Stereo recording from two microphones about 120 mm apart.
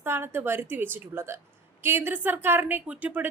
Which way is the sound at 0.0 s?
20° right (ahead or behind).